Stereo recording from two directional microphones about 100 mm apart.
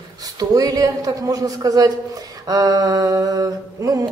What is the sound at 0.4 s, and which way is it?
Speech, 40° right (ahead or behind).